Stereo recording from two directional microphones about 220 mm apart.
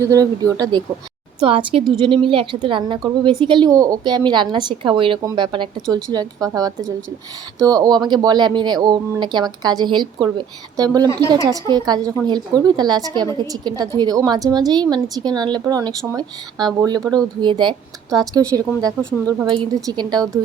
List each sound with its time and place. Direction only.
0.0 s a woman's voice: 15° right (ahead or behind)